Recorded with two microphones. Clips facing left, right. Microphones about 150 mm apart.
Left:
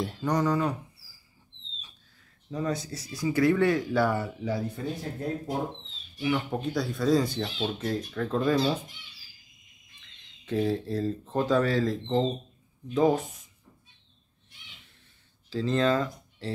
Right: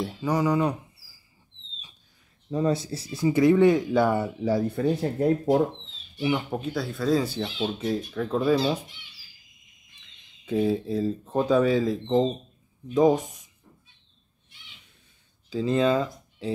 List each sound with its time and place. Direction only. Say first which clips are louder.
0.0 s speech: right 2 dB; 5° right (ahead or behind)
2.5 s speech: right 6 dB; 25° right (ahead or behind)
4.7 s speech: right 9 dB; 75° right (ahead or behind)
6.5 s speech: even; centre (ahead or behind)
10.4 s speech: right 3 dB; 10° right (ahead or behind)
15.5 s speech: right 3 dB; 10° right (ahead or behind)